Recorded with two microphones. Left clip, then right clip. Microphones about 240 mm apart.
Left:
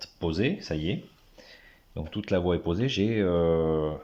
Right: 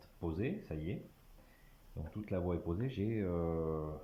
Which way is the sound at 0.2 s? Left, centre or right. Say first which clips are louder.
Left 12 dB; left.